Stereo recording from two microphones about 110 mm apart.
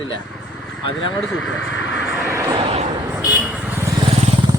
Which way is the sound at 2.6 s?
55° right (ahead or behind).